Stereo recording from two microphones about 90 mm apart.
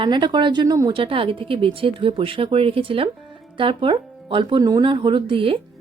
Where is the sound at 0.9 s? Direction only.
80° right.